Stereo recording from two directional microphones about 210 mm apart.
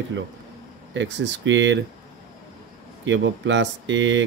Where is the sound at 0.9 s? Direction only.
60° right (ahead or behind).